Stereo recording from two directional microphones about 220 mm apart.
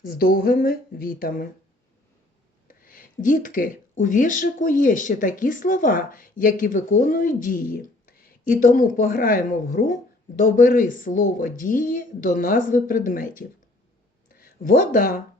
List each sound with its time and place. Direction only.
0.0 s speech: 45° left (ahead or behind)
2.6 s speech: 40° left (ahead or behind)
14.3 s speech: 40° left (ahead or behind)